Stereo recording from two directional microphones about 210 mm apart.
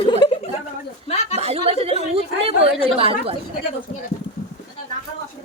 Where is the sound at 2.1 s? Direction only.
30° right (ahead or behind).